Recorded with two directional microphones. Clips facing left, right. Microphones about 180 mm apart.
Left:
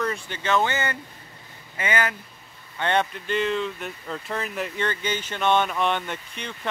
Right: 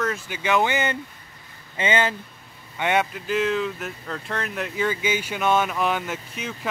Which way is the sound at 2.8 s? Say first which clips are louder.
Right 1 dB; 5° right (ahead or behind).